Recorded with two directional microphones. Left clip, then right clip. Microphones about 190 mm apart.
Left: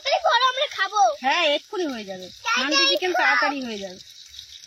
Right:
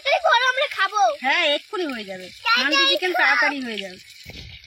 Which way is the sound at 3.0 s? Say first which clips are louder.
Right 1 dB; 5° left (ahead or behind).